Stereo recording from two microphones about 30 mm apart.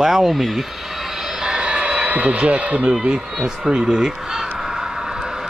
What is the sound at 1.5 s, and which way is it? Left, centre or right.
Vehicle, right.